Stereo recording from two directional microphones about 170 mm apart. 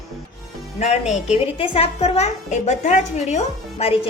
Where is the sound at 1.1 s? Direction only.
35° left (ahead or behind).